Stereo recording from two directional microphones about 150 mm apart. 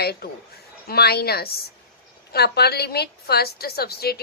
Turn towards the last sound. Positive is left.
turn(degrees=90)